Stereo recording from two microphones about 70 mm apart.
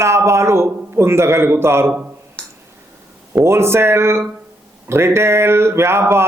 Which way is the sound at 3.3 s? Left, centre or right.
Right.